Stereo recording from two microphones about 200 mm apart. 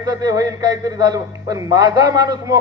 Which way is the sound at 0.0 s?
20° right (ahead or behind).